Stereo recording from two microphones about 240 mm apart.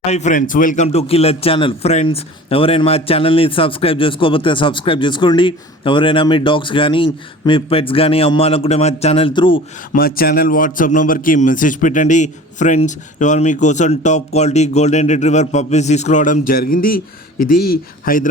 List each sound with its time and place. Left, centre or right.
0.0 s speech: left
9.9 s a man's voice: left